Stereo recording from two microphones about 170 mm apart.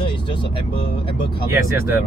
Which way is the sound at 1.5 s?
15° right (ahead or behind).